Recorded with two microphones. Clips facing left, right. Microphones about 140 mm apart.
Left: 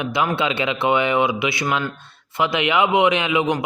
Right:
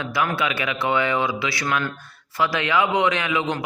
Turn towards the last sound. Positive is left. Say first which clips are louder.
# left 4 dB
turn(degrees=20)  # may be behind; listen again after turning